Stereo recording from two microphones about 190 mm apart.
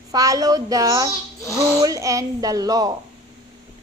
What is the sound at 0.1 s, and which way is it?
A woman's voice, 20° right (ahead or behind).